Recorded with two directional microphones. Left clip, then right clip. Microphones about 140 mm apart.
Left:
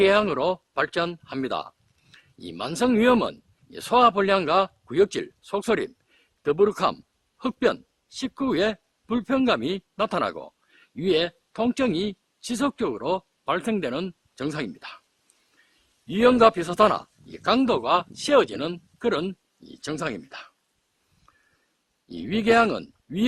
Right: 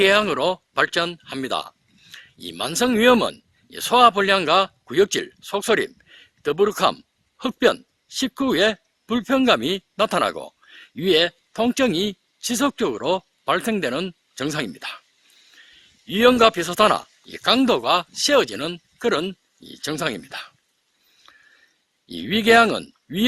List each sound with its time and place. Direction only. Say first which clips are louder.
0.0 s speech: right 3 dB; 30° right (ahead or behind)
16.0 s speech: right 2 dB; 30° right (ahead or behind)
21.2 s a sound: right 9 dB; 30° right (ahead or behind)
22.0 s speech: right 4 dB; 30° right (ahead or behind)